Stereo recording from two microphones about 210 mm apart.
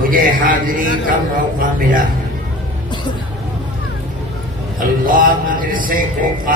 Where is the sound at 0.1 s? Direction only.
40° right (ahead or behind).